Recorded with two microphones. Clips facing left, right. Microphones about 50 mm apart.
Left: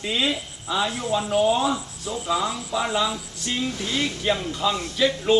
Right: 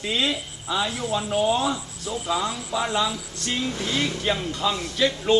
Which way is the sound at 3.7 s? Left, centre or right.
Right.